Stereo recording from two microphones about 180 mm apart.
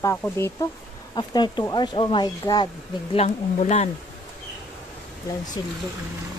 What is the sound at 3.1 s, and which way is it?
Speech, 35° left (ahead or behind).